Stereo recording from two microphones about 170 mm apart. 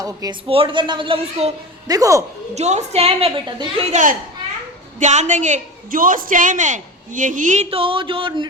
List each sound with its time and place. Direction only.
0.0 s speech: 20° right (ahead or behind)
0.4 s a woman's voice: 35° right (ahead or behind)
1.9 s speech: 20° right (ahead or behind)
2.6 s a woman's voice: 40° right (ahead or behind)
3.9 s a woman's voice: 50° right (ahead or behind); by 8.4 s 30° right (ahead or behind)